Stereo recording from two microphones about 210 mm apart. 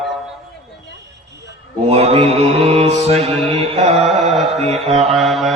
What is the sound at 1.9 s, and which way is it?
Mantra, 30° right (ahead or behind).